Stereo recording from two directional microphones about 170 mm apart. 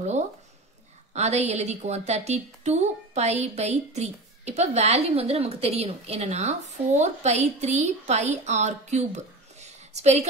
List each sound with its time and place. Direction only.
1.1 s a woman's voice: 40° right (ahead or behind)